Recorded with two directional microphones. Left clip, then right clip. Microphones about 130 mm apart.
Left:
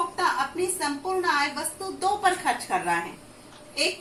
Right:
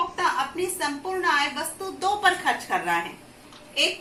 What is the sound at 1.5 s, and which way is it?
A woman's voice, 5° left (ahead or behind).